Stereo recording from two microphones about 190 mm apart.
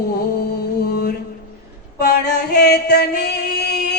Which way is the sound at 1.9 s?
60° left (ahead or behind).